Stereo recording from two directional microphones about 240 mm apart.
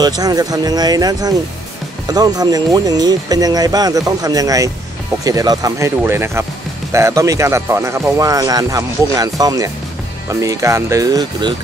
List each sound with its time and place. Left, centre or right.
0.0 s speech: centre